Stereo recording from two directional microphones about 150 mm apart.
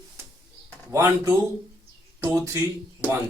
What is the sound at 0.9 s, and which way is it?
Speech, 20° right (ahead or behind).